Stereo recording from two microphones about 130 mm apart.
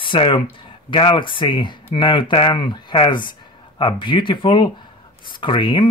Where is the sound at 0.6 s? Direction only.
40° left (ahead or behind).